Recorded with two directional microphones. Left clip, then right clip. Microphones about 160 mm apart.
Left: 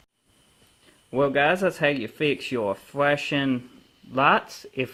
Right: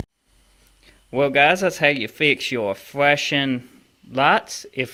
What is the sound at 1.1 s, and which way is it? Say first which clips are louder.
Speech: right 5 dB; 10° right (ahead or behind).